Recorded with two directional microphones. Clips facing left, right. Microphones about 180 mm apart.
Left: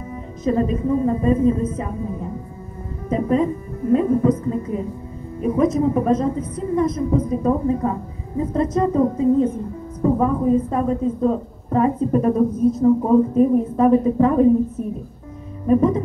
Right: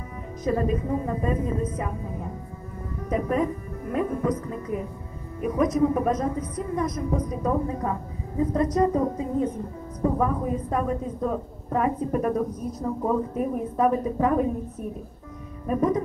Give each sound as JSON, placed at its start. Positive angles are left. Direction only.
{"t": 0.4, "sound": "a woman's voice", "side_deg": 25}
{"t": 3.1, "sound": "a woman's voice", "side_deg": 25}
{"t": 15.6, "sound": "a woman's voice", "side_deg": 25}